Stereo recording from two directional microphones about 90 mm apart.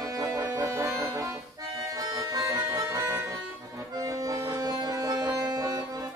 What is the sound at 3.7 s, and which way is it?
Accordion, 40° right (ahead or behind).